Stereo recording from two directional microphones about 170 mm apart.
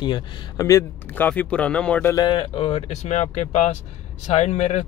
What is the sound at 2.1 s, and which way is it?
Speech, 25° left (ahead or behind).